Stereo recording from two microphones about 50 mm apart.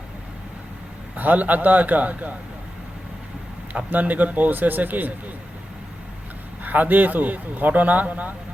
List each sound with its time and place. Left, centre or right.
1.1 s speech: right
3.8 s speech: right
6.7 s speech: right